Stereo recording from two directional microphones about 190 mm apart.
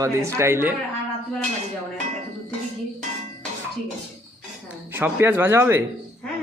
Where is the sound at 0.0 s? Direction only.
15° right (ahead or behind).